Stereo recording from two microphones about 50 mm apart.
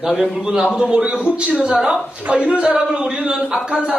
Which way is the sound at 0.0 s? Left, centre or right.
Centre.